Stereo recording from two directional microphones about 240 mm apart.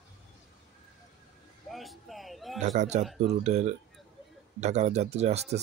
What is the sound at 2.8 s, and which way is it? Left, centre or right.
Speech, right.